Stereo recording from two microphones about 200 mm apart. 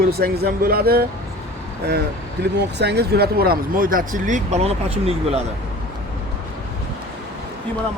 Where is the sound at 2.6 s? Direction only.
55° right (ahead or behind); by 5.4 s 30° right (ahead or behind).